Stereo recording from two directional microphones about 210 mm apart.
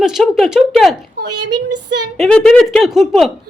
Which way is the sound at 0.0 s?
Centre (ahead or behind).